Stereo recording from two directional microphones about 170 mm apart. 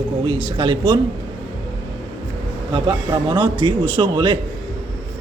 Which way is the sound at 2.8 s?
25° right (ahead or behind).